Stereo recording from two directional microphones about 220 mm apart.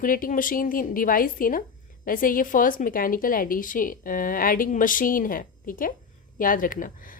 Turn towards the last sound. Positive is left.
turn(degrees=40)  # may be behind; listen again after turning